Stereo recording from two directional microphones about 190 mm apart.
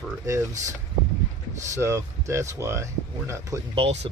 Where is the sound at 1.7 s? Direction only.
15° right (ahead or behind).